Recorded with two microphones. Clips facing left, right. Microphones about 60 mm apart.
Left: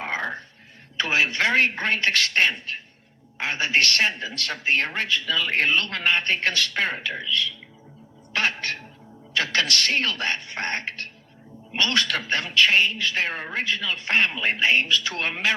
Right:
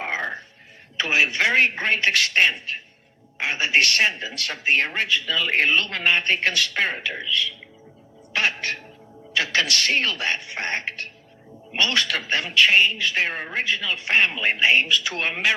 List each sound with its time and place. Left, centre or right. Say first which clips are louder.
0.0 s music: right 1 dB; right
0.9 s a man's voice: right 1 dB; right
8.3 s music: right 1 dB; right
9.7 s a man's voice: right 1 dB; right